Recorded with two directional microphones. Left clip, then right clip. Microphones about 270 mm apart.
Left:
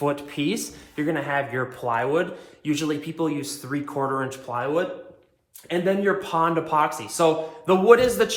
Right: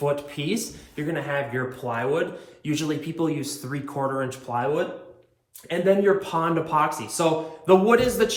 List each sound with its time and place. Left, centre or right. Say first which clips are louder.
0.0 s speech: left 1 dB; left
2.6 s speech: left 1 dB; centre